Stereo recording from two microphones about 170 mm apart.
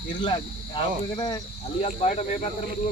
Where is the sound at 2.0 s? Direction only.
35° left (ahead or behind).